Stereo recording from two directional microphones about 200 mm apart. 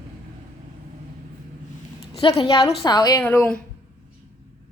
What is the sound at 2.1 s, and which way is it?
A woman's voice, 30° left (ahead or behind).